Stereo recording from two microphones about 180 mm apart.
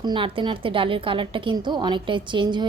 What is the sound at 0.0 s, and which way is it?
A woman's voice, 25° right (ahead or behind).